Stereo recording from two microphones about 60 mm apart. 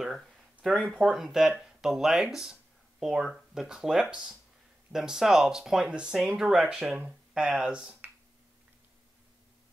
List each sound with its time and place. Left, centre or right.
0.6 s speech: centre
1.1 s speech: centre
7.1 s speech: centre